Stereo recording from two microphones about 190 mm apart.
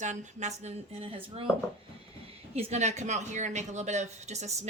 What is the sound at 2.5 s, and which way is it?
Speech, 35° right (ahead or behind).